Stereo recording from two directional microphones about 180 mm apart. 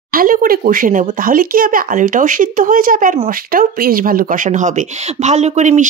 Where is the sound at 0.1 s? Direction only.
50° right (ahead or behind).